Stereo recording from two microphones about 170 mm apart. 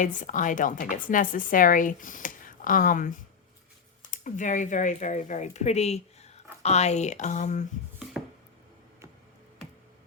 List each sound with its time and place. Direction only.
0.0 s speech: 50° left (ahead or behind)
4.1 s speech: 45° left (ahead or behind)